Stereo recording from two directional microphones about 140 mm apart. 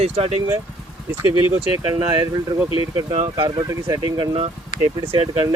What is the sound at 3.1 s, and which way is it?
Speech, 50° right (ahead or behind).